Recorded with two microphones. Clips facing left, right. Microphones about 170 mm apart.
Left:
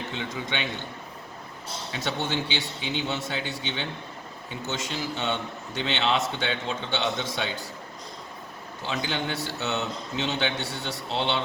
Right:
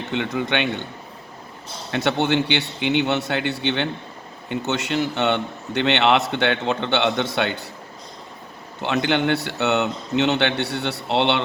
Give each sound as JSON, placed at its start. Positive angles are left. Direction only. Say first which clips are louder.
{"t": 0.1, "sound": "a man's voice", "louder": "right 13 dB", "side_deg": -65}
{"t": 1.9, "sound": "a man's voice", "louder": "right 10 dB", "side_deg": -65}
{"t": 8.8, "sound": "a man's voice", "louder": "right 9 dB", "side_deg": -65}